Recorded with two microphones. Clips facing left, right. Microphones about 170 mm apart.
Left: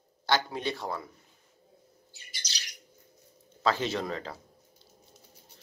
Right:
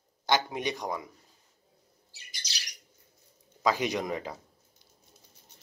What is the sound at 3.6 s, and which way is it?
Speech, 15° right (ahead or behind).